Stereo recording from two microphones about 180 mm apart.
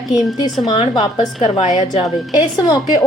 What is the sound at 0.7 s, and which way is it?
A woman's voice, 25° left (ahead or behind).